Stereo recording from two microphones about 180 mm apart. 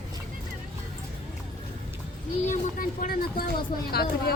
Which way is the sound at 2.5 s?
45° left (ahead or behind).